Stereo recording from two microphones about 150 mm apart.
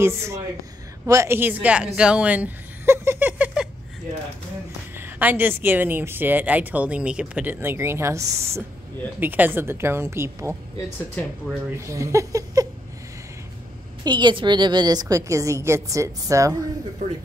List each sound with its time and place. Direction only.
0.0 s a woman's voice: 20° right (ahead or behind)
4.9 s speech: 15° right (ahead or behind)
11.2 s speech: 10° left (ahead or behind)
11.8 s a woman's voice: 20° right (ahead or behind)
14.0 s a woman's voice: 30° right (ahead or behind)